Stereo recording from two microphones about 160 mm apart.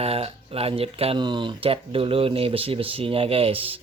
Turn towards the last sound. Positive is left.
turn(degrees=-35)  # may be behind; listen again after turning